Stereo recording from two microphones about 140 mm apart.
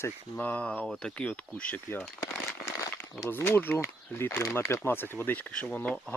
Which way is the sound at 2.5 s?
20° left (ahead or behind).